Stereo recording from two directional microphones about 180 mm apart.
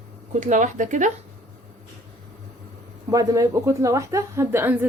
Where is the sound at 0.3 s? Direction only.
45° right (ahead or behind).